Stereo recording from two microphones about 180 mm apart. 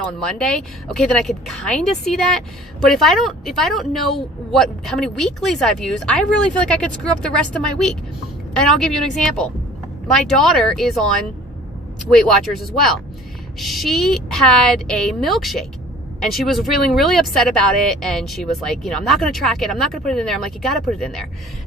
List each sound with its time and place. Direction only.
0.2 s speech: 5° left (ahead or behind)
12.1 s speech: centre (ahead or behind)